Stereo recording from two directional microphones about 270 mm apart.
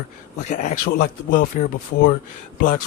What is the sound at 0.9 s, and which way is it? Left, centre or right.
Speech, left.